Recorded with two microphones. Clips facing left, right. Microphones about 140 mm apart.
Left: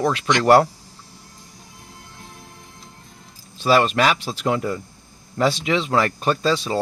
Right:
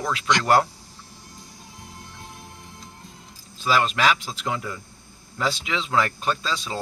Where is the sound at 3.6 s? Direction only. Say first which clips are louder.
Left 4 dB; 35° left (ahead or behind).